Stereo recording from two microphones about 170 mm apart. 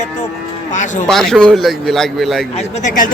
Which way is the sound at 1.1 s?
5° left (ahead or behind).